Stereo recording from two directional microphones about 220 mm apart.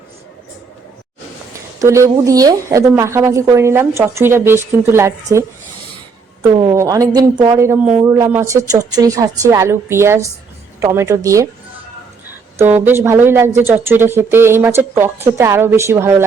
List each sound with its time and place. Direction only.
1.8 s a woman's voice: 15° right (ahead or behind)
6.5 s a woman's voice: 20° right (ahead or behind)
12.5 s a woman's voice: 10° right (ahead or behind)